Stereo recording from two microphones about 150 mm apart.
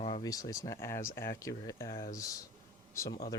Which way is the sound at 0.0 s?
35° left (ahead or behind).